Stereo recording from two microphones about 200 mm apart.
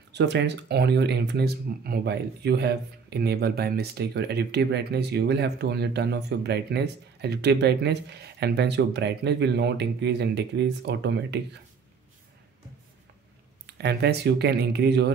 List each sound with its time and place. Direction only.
0.1 s speech: 60° right (ahead or behind)
13.7 s speech: 55° right (ahead or behind)